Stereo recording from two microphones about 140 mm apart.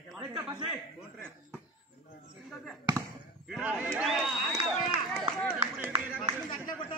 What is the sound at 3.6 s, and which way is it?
A man's voice, 10° right (ahead or behind).